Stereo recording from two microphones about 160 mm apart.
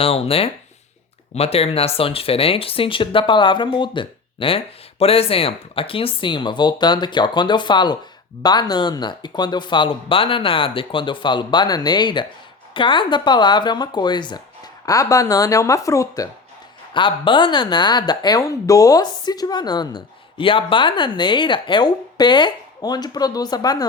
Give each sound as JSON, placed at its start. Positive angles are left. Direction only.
{"t": 0.0, "sound": "speech", "side_deg": 35}
{"t": 16.9, "sound": "speech", "side_deg": 30}